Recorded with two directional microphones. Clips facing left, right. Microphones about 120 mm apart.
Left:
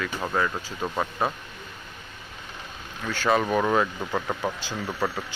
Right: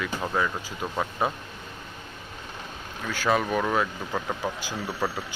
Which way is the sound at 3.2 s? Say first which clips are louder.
Left 2 dB; centre (ahead or behind).